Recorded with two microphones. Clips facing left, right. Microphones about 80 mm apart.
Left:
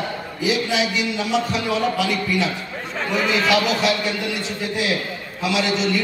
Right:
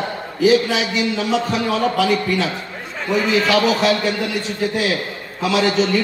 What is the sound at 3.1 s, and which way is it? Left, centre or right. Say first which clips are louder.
Speech: right 3 dB; centre.